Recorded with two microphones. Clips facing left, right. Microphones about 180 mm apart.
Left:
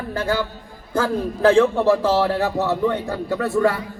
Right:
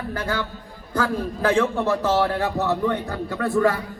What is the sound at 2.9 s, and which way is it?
Music, 25° left (ahead or behind).